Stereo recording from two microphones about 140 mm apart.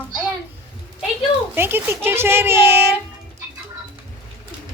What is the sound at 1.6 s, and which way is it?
A child's voice, 15° right (ahead or behind).